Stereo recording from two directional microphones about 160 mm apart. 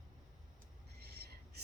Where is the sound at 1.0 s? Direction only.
80° right.